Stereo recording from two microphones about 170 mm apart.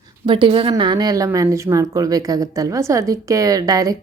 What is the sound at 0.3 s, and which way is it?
A woman's voice, 30° right (ahead or behind).